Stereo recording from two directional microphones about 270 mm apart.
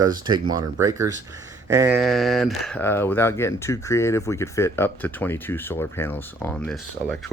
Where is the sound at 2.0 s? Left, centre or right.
Centre.